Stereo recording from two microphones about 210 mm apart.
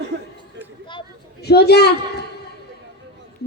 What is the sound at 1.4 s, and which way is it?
Speech, 50° left (ahead or behind).